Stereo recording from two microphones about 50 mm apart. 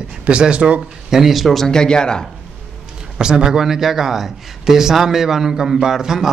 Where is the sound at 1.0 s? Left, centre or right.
Centre.